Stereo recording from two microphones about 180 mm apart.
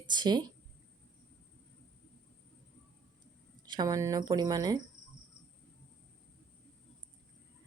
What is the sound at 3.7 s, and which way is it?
Speech, 20° right (ahead or behind).